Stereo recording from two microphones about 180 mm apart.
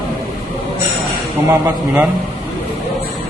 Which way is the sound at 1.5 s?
10° right (ahead or behind).